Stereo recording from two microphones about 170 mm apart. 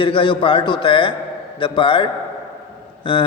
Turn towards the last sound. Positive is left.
turn(degrees=30)  # may be behind; listen again after turning